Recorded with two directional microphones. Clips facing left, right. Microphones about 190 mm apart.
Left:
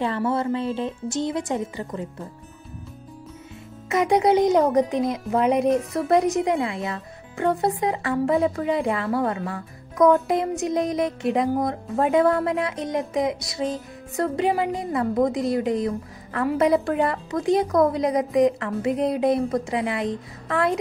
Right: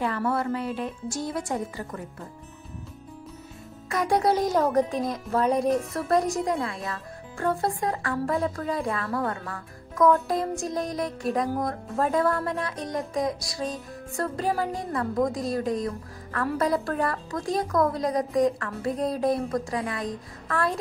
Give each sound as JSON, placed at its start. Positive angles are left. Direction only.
{"t": 0.0, "sound": "speech", "side_deg": 25}
{"t": 3.9, "sound": "speech", "side_deg": 20}